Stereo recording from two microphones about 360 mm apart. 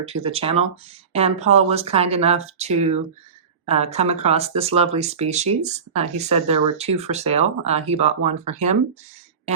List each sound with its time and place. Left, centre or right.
0.0 s speech: centre